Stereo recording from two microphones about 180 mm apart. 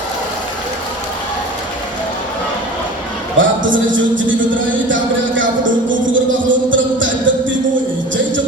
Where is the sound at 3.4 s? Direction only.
90° right.